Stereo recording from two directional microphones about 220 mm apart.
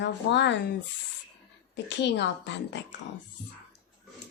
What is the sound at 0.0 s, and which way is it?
Speech, 55° left (ahead or behind).